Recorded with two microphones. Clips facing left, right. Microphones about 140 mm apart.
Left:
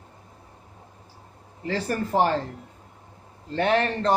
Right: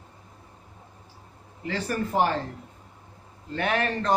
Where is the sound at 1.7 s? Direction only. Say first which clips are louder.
Left 2 dB; 35° left (ahead or behind).